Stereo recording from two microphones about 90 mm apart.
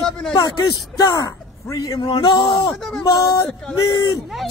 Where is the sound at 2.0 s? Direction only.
55° left (ahead or behind).